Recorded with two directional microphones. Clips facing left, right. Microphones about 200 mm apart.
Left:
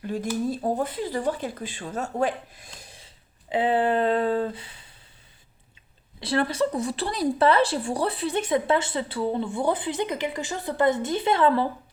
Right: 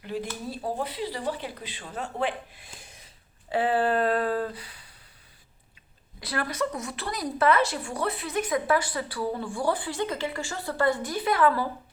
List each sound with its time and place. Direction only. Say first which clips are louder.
0.5 s speech: left 5 dB; 45° left (ahead or behind)
2.8 s a sound: left 2 dB; 30° left (ahead or behind)
3.5 s speech: left 2 dB; 20° left (ahead or behind)
6.1 s speech: left 6 dB; 25° left (ahead or behind)